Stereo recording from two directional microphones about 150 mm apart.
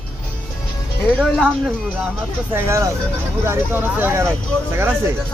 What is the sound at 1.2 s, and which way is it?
Speech, 5° left (ahead or behind).